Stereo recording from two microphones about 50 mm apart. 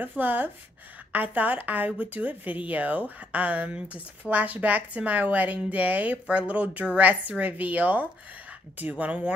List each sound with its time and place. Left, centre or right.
0.0 s speech: right